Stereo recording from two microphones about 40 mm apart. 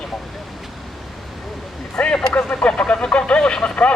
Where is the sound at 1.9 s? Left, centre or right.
Left.